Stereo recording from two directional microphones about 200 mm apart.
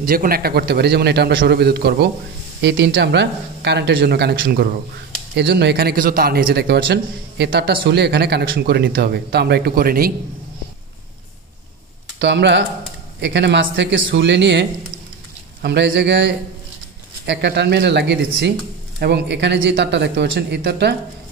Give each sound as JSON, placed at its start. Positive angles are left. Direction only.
{"t": 0.0, "sound": "speech", "side_deg": -45}
{"t": 12.2, "sound": "speech", "side_deg": -60}